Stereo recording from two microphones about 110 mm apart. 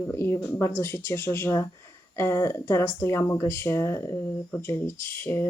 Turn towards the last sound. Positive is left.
turn(degrees=20)  # may be behind; listen again after turning